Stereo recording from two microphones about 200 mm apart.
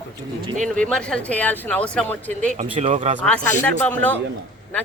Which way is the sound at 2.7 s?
35° right (ahead or behind).